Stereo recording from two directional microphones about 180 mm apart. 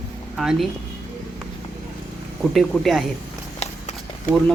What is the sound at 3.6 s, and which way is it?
Clip-clop, 40° left (ahead or behind).